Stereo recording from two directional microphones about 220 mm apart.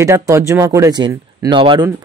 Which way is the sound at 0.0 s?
15° right (ahead or behind).